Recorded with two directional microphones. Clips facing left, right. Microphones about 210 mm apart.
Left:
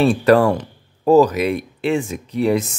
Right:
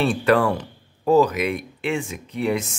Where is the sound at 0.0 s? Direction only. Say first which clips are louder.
Left 5 dB; 40° left (ahead or behind).